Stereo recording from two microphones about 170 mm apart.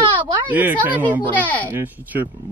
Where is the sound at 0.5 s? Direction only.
10° right (ahead or behind).